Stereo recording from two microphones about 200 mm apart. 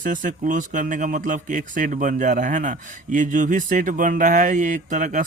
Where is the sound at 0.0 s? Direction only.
40° right (ahead or behind).